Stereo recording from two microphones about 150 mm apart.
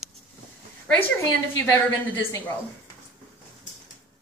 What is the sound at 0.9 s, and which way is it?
A woman's voice, 10° left (ahead or behind).